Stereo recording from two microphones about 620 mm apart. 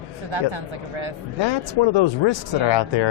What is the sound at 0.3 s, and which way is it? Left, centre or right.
Speech, right.